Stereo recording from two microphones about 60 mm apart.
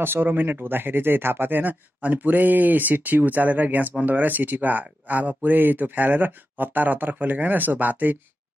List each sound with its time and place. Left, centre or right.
0.0 s speech: right